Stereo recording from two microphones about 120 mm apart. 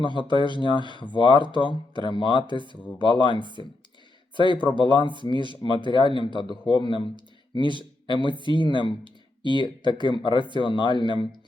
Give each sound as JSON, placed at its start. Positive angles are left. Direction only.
{"t": 0.0, "sound": "speech", "side_deg": 40}
{"t": 3.3, "sound": "speech", "side_deg": -40}
{"t": 4.8, "sound": "speech", "side_deg": 40}